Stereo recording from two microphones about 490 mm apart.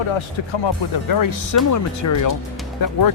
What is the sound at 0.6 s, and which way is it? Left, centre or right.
Speech, left.